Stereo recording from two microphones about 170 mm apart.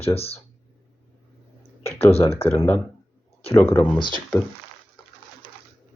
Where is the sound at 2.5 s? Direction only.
15° left (ahead or behind).